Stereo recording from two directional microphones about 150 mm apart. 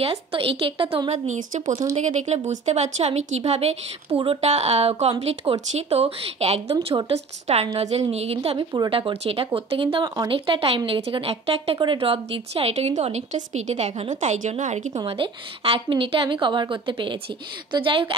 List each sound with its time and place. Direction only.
0.0 s speech: 40° right (ahead or behind)
1.1 s speech: 55° right (ahead or behind)
15.0 s speech: 40° right (ahead or behind)